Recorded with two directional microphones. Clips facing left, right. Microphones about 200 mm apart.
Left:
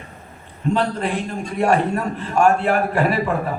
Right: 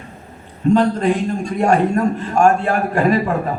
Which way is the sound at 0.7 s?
45° right (ahead or behind).